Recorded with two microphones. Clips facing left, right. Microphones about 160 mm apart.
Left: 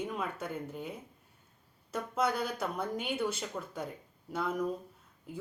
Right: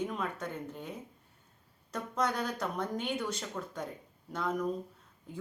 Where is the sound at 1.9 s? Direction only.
5° left (ahead or behind).